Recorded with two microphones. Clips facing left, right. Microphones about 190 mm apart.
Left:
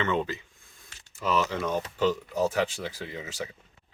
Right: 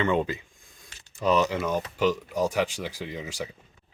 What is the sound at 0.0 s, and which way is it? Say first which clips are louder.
Speech: right 3 dB; 15° right (ahead or behind).